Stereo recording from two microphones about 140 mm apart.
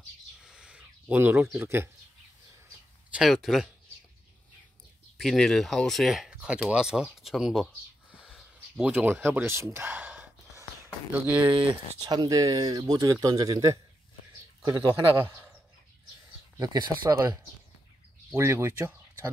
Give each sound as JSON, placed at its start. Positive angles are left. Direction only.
{"t": 0.4, "sound": "a sound", "side_deg": -5}
{"t": 3.1, "sound": "speech", "side_deg": -5}
{"t": 5.1, "sound": "speech", "side_deg": 0}
{"t": 11.7, "sound": "speech", "side_deg": -30}
{"t": 15.1, "sound": "speech", "side_deg": -20}
{"t": 16.5, "sound": "speech", "side_deg": -30}
{"t": 18.3, "sound": "speech", "side_deg": -20}